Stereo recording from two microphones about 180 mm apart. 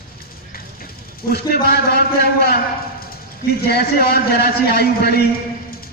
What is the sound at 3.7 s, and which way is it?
A man's voice, 60° left (ahead or behind).